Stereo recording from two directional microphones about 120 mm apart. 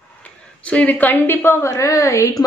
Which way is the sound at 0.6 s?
10° left (ahead or behind).